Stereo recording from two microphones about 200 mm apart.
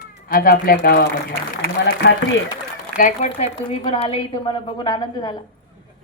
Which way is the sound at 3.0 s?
35° left (ahead or behind).